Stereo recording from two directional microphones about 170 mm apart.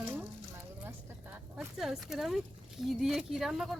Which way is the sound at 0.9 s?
10° right (ahead or behind).